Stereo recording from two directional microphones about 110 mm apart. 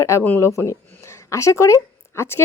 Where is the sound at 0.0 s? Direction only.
20° left (ahead or behind).